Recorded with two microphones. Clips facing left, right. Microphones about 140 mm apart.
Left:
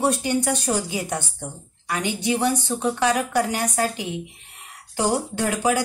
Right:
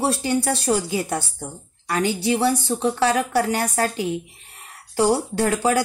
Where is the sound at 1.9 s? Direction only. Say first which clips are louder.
Right 3 dB; 35° right (ahead or behind).